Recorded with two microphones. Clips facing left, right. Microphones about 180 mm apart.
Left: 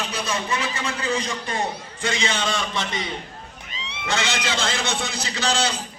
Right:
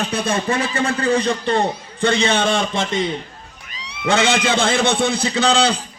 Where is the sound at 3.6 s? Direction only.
25° left (ahead or behind).